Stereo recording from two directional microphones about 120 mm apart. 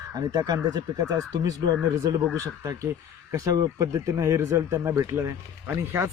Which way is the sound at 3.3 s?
25° right (ahead or behind).